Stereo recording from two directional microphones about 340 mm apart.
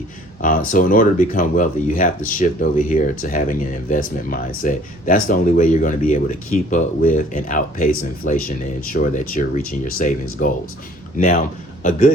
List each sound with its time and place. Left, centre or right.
0.7 s a man's voice: left